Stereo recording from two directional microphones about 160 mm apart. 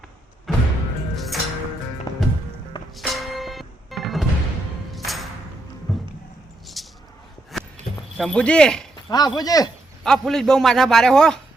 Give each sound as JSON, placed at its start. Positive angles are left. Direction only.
{"t": 0.5, "sound": "music", "side_deg": 0}
{"t": 2.1, "sound": "music", "side_deg": 25}
{"t": 2.9, "sound": "music", "side_deg": 0}
{"t": 5.9, "sound": "a sound", "side_deg": 0}
{"t": 8.2, "sound": "a man's voice", "side_deg": 5}
{"t": 9.0, "sound": "speech", "side_deg": 25}
{"t": 10.0, "sound": "a man's voice", "side_deg": 5}